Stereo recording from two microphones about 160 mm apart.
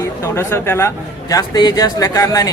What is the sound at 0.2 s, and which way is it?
A man's voice, 15° left (ahead or behind).